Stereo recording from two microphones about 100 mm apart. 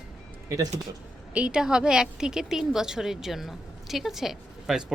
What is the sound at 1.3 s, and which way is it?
A woman's voice, 10° right (ahead or behind).